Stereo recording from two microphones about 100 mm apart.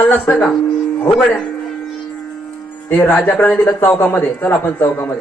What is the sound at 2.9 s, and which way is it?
Speech, 20° left (ahead or behind).